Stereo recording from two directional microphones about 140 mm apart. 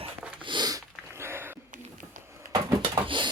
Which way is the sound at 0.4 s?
30° right (ahead or behind).